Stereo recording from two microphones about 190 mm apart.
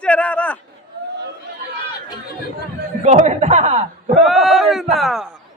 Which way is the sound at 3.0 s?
35° right (ahead or behind).